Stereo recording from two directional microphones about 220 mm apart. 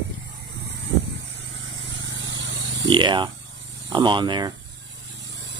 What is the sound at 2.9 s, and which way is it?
Speech, 20° right (ahead or behind).